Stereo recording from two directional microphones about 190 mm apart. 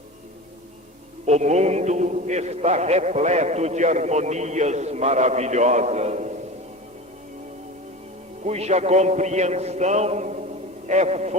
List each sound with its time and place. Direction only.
1.3 s a man's voice: 35° right (ahead or behind)
8.4 s a man's voice: 35° right (ahead or behind)